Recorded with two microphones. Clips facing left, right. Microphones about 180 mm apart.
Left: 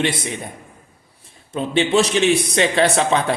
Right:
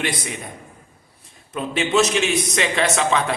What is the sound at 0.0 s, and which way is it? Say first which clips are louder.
Speech: left 4 dB; 25° left (ahead or behind).